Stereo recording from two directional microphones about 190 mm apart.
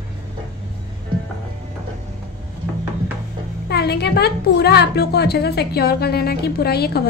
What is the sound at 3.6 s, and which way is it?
A woman's voice, 55° left (ahead or behind).